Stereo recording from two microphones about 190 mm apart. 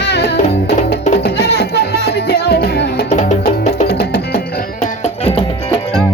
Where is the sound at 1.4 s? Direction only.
60° left (ahead or behind).